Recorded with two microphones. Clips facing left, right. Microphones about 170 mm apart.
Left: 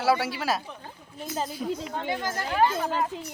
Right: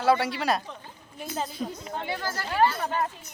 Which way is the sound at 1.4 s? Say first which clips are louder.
Left 3 dB; 10° left (ahead or behind).